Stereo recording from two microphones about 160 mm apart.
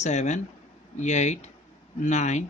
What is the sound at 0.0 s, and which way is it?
Speech, 45° left (ahead or behind).